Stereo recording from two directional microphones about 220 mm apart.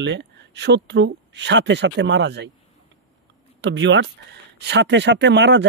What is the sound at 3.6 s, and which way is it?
Speech, 55° right (ahead or behind).